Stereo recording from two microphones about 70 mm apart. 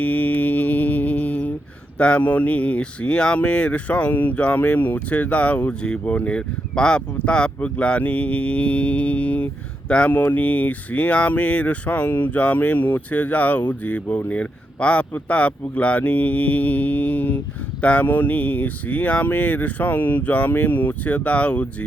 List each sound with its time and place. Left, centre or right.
0.0 s mantra: left
2.0 s speech: centre